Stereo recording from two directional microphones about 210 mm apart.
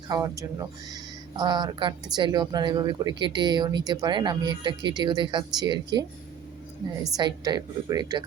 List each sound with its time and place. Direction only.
0.1 s speech: 15° right (ahead or behind)